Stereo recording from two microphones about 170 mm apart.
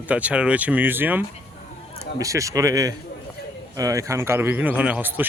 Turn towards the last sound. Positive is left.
turn(degrees=-10)  # may be behind; listen again after turning